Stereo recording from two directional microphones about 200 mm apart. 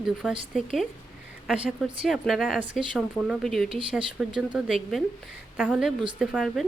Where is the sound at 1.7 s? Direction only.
Centre (ahead or behind).